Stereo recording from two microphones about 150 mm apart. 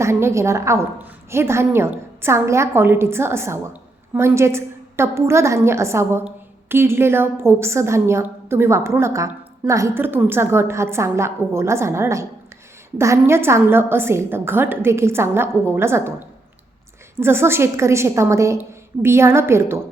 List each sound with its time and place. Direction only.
0.0 s a woman's voice: 15° right (ahead or behind)
17.2 s a woman's voice: 15° right (ahead or behind)